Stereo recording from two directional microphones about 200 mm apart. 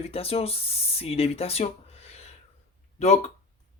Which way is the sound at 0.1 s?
30° left (ahead or behind).